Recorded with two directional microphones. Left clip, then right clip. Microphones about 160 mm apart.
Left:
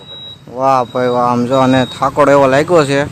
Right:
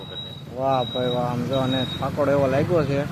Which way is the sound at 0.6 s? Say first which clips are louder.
Left 10 dB; 50° left (ahead or behind).